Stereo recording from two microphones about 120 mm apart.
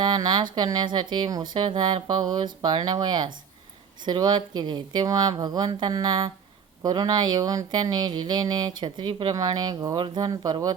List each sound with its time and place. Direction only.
0.0 s speech: 35° right (ahead or behind)